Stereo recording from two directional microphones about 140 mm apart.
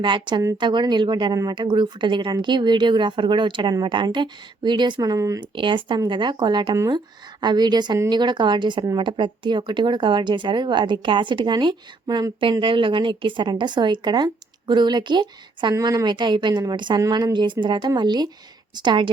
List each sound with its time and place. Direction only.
0.0 s a woman's voice: 35° right (ahead or behind)
5.4 s a woman's voice: 35° right (ahead or behind)